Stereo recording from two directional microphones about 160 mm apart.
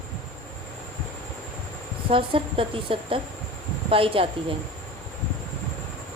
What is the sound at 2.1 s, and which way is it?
A woman's voice, 35° right (ahead or behind).